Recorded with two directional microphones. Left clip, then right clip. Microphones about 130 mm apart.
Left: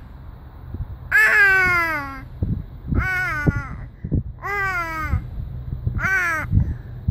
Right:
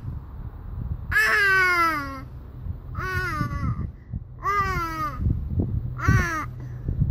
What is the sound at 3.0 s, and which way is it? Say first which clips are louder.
Babbling: left 5 dB; 30° left (ahead or behind).